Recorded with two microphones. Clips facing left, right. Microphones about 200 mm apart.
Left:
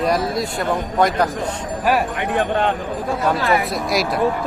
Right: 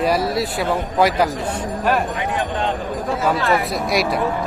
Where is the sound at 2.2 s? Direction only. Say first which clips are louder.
Left 3 dB; 60° left (ahead or behind).